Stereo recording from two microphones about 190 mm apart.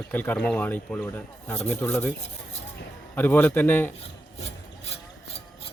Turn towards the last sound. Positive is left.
turn(degrees=30)  # may be behind; listen again after turning